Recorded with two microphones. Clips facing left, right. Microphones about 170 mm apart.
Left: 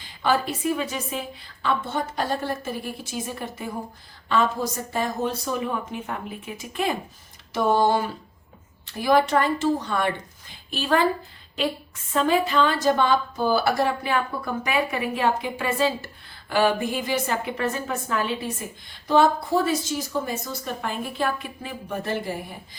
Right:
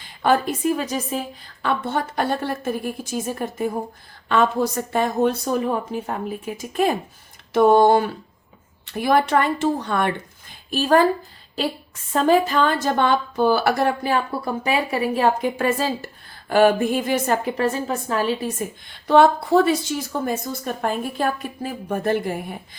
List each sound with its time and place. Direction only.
0.2 s a woman's voice: 50° right (ahead or behind)
1.6 s a woman's voice: 60° right (ahead or behind)
4.3 s a woman's voice: 60° right (ahead or behind)
5.5 s a woman's voice: 35° right (ahead or behind)
7.5 s a woman's voice: 55° right (ahead or behind)
10.7 s a woman's voice: 45° right (ahead or behind)
12.1 s a woman's voice: 40° right (ahead or behind); by 13.9 s 60° right (ahead or behind)
14.0 s a woman's voice: 35° right (ahead or behind)
19.0 s a woman's voice: 65° right (ahead or behind)